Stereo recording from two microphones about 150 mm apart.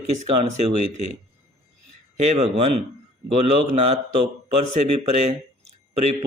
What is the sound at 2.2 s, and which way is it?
A man's voice, 45° right (ahead or behind).